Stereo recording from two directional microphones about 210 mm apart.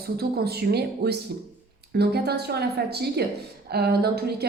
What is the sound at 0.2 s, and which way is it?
A woman's voice, 50° right (ahead or behind).